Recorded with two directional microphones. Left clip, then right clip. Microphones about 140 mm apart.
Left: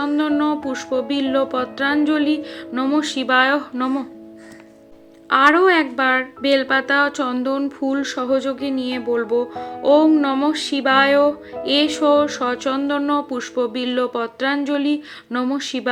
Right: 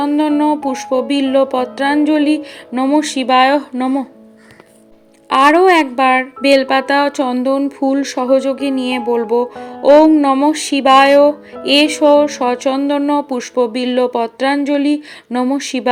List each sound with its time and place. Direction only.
0.0 s speech: 20° right (ahead or behind)
5.3 s speech: 30° right (ahead or behind)